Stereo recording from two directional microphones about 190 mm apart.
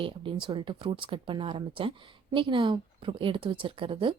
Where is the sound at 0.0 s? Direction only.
25° right (ahead or behind).